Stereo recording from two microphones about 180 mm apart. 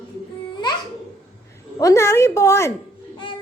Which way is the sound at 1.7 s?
15° left (ahead or behind).